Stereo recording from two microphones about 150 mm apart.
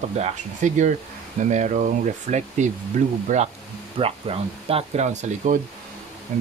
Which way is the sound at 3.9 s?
40° right (ahead or behind).